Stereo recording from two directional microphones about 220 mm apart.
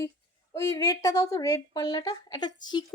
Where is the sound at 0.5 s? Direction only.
15° left (ahead or behind).